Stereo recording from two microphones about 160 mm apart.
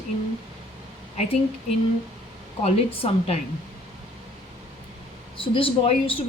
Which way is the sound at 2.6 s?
40° left (ahead or behind).